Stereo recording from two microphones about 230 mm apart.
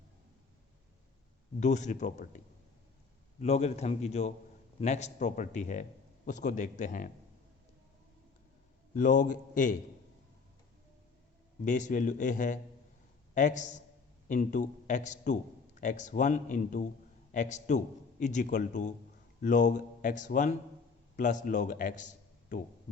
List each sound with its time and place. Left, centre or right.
1.5 s a man's voice: left
3.4 s a man's voice: left
9.0 s a man's voice: left
11.6 s a man's voice: left